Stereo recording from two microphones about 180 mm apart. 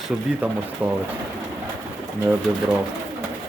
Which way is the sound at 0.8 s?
10° right (ahead or behind).